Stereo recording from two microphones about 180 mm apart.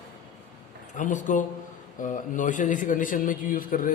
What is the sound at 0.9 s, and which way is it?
A man's voice, 45° left (ahead or behind).